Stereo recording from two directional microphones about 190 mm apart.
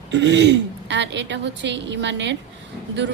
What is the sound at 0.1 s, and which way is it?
A woman's voice, 65° right (ahead or behind).